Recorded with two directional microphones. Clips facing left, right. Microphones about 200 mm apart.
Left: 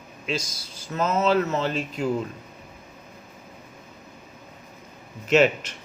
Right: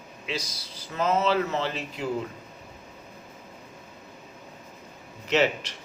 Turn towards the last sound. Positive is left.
turn(degrees=50)  # may be behind; listen again after turning